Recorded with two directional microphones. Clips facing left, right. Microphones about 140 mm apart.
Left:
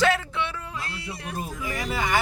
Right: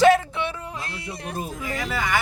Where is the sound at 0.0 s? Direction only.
20° right (ahead or behind).